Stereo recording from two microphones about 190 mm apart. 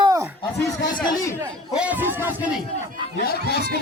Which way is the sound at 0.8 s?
20° left (ahead or behind).